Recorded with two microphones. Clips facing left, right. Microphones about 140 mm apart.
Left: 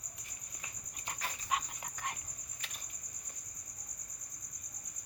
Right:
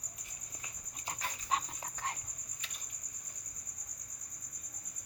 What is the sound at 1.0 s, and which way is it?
Dog, 30° right (ahead or behind).